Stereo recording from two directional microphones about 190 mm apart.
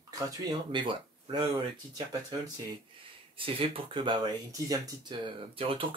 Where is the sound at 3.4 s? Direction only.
30° right (ahead or behind).